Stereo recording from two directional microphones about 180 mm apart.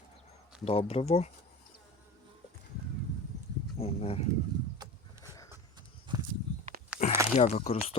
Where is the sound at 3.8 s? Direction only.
35° left (ahead or behind).